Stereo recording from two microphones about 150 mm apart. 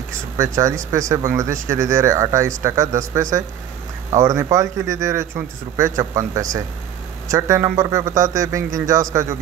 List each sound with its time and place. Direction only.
0.4 s a man's voice: 20° right (ahead or behind)